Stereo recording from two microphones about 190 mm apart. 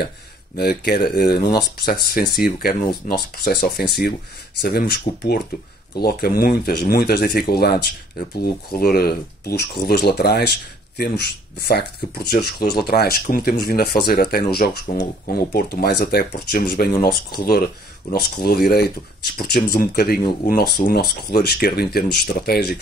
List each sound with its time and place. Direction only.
0.6 s speech: 55° left (ahead or behind)
18.1 s speech: 55° left (ahead or behind)